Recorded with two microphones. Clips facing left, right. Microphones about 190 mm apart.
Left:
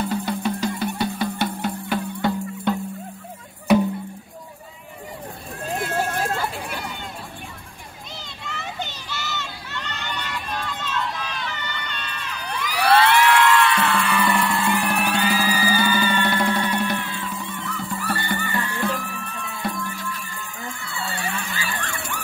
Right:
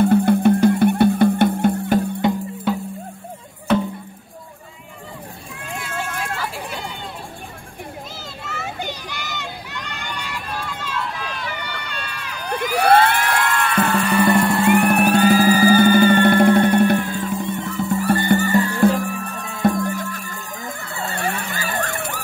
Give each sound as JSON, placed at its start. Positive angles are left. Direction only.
{"t": 0.0, "sound": "music", "side_deg": -55}
{"t": 2.2, "sound": "music", "side_deg": -20}
{"t": 2.7, "sound": "music", "side_deg": -5}
{"t": 5.6, "sound": "vehicle", "side_deg": 35}
{"t": 8.5, "sound": "children playing", "side_deg": -5}
{"t": 12.5, "sound": "music", "side_deg": -50}
{"t": 14.7, "sound": "music", "side_deg": -60}
{"t": 21.3, "sound": "vehicle", "side_deg": -65}
{"t": 21.5, "sound": "emergency vehicle", "side_deg": -45}